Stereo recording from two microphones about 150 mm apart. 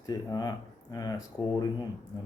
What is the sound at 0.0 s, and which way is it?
Speech, 25° left (ahead or behind).